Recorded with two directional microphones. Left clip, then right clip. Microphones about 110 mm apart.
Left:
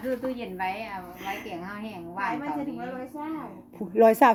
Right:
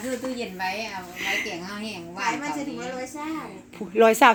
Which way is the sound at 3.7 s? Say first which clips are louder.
Right 1 dB; 30° left (ahead or behind).